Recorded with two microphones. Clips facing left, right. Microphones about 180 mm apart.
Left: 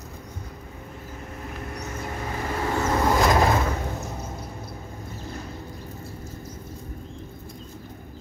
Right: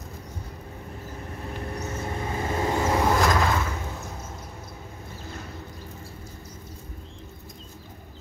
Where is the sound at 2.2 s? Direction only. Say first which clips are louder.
Right 1 dB; 25° right (ahead or behind).